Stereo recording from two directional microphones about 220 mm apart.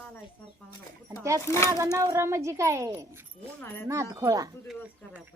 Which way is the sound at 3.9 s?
15° right (ahead or behind).